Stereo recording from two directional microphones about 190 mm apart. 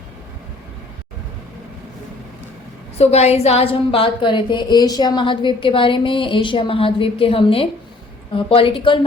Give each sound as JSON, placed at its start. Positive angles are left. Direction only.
{"t": 3.0, "sound": "a woman's voice", "side_deg": 35}